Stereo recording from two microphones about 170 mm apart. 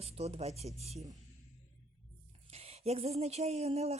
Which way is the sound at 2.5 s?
40° right (ahead or behind).